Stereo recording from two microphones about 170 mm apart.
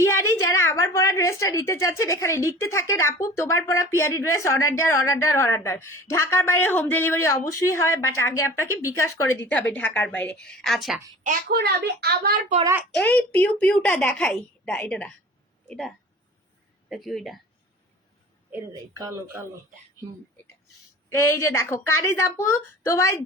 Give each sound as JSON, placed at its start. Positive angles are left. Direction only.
{"t": 0.0, "sound": "a woman's voice", "side_deg": 15}
{"t": 11.3, "sound": "a woman's voice", "side_deg": -65}
{"t": 12.9, "sound": "a woman's voice", "side_deg": 10}
{"t": 16.9, "sound": "a woman's voice", "side_deg": 0}
{"t": 18.7, "sound": "speech", "side_deg": -20}
{"t": 21.1, "sound": "a woman's voice", "side_deg": 15}